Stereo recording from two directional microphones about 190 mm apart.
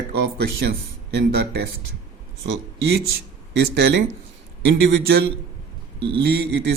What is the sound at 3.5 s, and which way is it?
Speech, 65° right (ahead or behind).